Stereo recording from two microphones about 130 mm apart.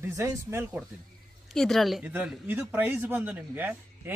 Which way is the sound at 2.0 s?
15° right (ahead or behind).